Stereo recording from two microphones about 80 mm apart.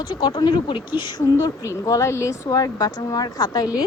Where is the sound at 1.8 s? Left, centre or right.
Left.